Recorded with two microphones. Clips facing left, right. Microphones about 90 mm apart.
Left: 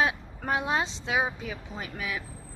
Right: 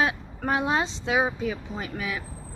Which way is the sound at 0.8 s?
Centre (ahead or behind).